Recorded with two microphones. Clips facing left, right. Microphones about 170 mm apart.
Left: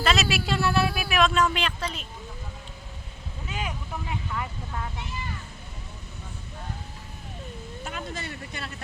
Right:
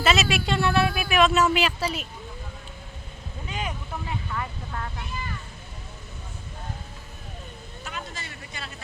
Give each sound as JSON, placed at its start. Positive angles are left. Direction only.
{"t": 0.0, "sound": "speech", "side_deg": 0}
{"t": 4.3, "sound": "vehicle", "side_deg": 10}
{"t": 7.9, "sound": "speech", "side_deg": 50}